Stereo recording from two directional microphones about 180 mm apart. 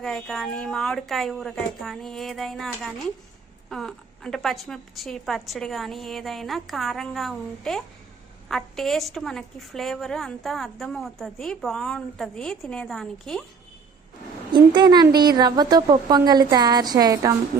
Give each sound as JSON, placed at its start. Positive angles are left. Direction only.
{"t": 0.0, "sound": "a woman's voice", "side_deg": 0}
{"t": 14.5, "sound": "a woman's voice", "side_deg": -25}